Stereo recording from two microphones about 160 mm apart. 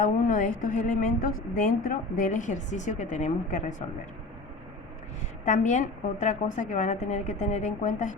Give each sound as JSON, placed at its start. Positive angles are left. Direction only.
{"t": 0.0, "sound": "a woman's voice", "side_deg": 55}
{"t": 5.5, "sound": "a woman's voice", "side_deg": 50}